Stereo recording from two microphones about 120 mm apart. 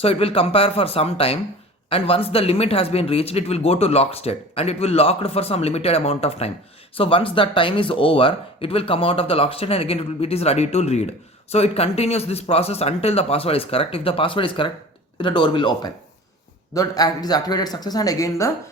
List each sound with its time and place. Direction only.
0.0 s speech: 55° left (ahead or behind); by 18.5 s 25° left (ahead or behind)